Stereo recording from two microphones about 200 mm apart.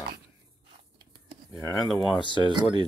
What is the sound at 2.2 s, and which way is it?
Speech, 25° right (ahead or behind).